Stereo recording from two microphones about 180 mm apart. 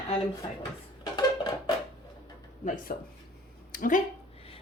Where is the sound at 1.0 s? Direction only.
25° left (ahead or behind).